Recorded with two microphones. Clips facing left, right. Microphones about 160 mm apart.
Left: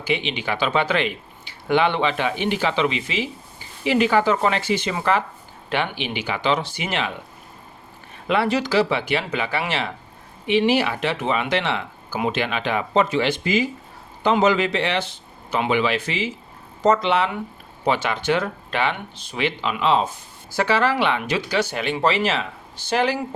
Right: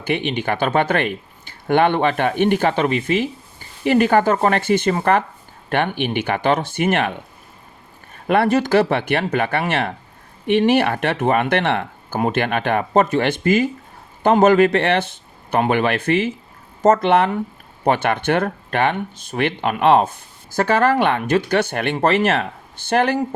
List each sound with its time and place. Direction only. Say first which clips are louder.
0.0 s speech: right 3 dB; 55° right (ahead or behind)
8.3 s speech: right 5 dB; 50° right (ahead or behind)